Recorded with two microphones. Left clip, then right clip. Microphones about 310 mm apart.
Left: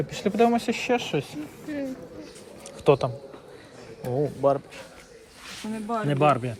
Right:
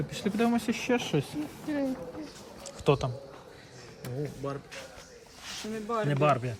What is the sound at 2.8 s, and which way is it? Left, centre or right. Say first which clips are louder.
Speech: left 6 dB; centre.